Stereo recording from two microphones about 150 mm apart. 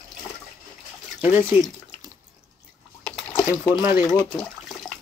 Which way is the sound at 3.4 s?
25° left (ahead or behind).